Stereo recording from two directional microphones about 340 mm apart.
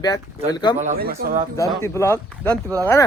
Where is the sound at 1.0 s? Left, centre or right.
Right.